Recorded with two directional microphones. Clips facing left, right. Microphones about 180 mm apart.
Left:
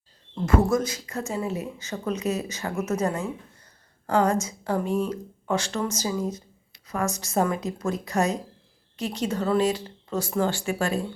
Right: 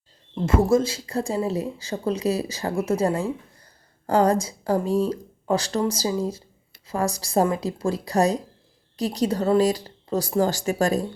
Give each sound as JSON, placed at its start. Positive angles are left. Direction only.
{"t": 0.4, "sound": "speech", "side_deg": -25}